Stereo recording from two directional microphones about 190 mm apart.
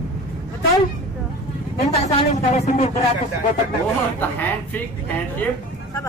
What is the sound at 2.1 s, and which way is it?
Speech, 35° left (ahead or behind).